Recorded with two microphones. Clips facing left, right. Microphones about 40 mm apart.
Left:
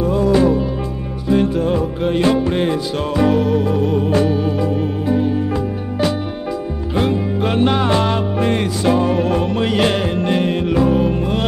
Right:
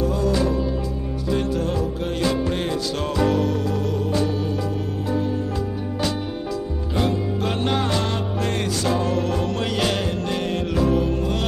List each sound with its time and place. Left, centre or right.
0.0 s music: left
1.3 s music: left
3.3 s music: centre
3.6 s music: left
7.0 s music: left